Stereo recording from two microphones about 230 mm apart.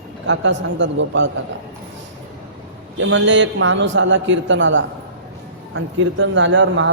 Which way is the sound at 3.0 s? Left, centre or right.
Right.